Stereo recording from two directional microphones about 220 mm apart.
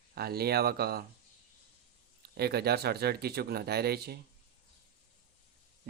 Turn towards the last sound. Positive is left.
turn(degrees=-45)  # may be behind; listen again after turning